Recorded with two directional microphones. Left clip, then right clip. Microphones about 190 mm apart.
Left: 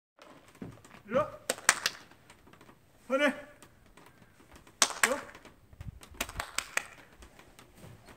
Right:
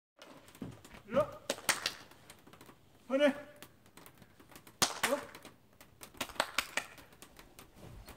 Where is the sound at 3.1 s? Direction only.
50° left (ahead or behind).